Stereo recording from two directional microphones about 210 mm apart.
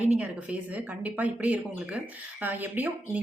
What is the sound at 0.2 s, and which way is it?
A woman's voice, 5° right (ahead or behind).